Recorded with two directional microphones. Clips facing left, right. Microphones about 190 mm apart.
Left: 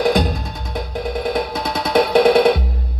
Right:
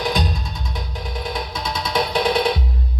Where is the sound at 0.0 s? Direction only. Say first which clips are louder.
Left 6 dB; 55° left (ahead or behind).